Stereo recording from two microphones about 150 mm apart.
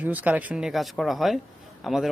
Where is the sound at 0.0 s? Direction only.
10° right (ahead or behind).